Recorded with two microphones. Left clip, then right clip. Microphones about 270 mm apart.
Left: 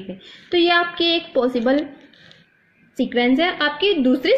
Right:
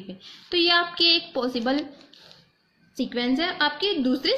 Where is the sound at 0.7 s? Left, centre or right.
Centre.